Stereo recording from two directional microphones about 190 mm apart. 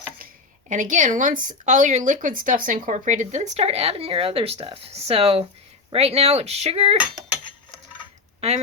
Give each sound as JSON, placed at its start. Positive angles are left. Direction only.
{"t": 0.7, "sound": "speech", "side_deg": -40}
{"t": 8.4, "sound": "speech", "side_deg": -35}